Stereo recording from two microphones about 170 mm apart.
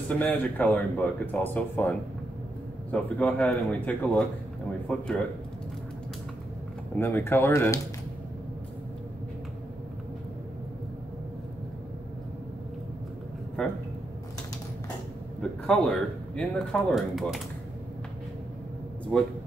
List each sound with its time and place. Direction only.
0.1 s speech: 10° left (ahead or behind)
7.0 s speech: 15° left (ahead or behind)
15.6 s speech: 5° left (ahead or behind)